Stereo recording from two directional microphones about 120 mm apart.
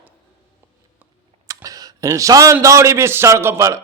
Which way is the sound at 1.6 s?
30° right (ahead or behind).